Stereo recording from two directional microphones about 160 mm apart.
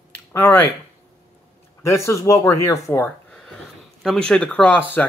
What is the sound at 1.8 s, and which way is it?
Speech, 20° left (ahead or behind).